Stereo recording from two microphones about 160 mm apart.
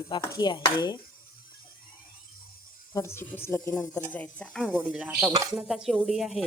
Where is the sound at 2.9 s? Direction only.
15° left (ahead or behind).